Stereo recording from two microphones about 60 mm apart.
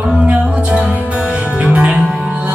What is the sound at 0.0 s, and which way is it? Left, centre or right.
Music, centre.